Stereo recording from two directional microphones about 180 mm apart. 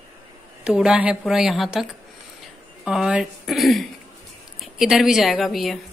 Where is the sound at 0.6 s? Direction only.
5° right (ahead or behind).